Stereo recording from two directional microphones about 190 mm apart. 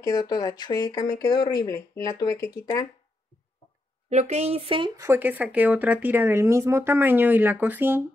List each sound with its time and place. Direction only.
0.0 s speech: 20° left (ahead or behind)
4.1 s speech: 35° right (ahead or behind); by 8.0 s 10° right (ahead or behind)